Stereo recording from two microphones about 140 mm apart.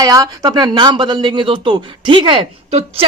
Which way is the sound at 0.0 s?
25° right (ahead or behind).